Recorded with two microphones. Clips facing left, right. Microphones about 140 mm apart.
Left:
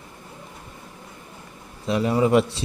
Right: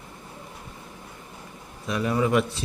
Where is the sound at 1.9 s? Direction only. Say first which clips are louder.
Left 4 dB; 25° left (ahead or behind).